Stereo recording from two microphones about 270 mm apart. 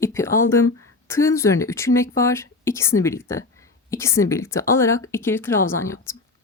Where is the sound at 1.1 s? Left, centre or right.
Centre.